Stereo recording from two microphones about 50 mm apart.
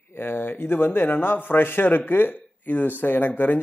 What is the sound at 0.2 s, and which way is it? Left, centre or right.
A man's voice, left.